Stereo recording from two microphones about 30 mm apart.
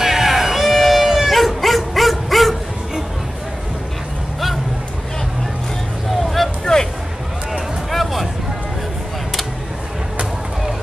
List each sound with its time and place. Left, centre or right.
0.0 s music: centre
6.0 s vehicle: centre
6.6 s vehicle: left
7.9 s a sound: centre